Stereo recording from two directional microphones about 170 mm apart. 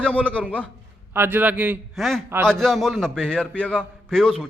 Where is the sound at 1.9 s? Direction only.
Centre (ahead or behind).